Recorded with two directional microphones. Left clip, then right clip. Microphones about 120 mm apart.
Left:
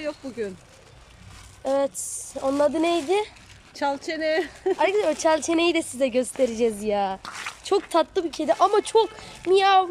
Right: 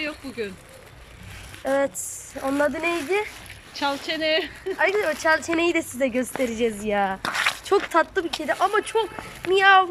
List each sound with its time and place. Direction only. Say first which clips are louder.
1.6 s speech: right 1 dB; 25° left (ahead or behind)
3.8 s speech: right 1 dB; 75° left (ahead or behind)
4.8 s speech: right 1 dB; 25° left (ahead or behind)